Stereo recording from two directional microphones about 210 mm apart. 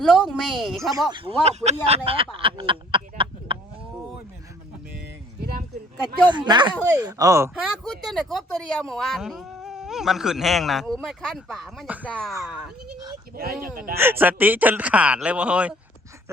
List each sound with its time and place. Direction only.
0.1 s speech: centre (ahead or behind)
0.9 s speech: 25° right (ahead or behind)
2.0 s a sound: 25° right (ahead or behind)
6.2 s speech: 20° right (ahead or behind)
7.6 s speech: centre (ahead or behind)
12.3 s speech: 15° right (ahead or behind)
13.3 s speech: 45° right (ahead or behind)
13.9 s speech: 10° right (ahead or behind)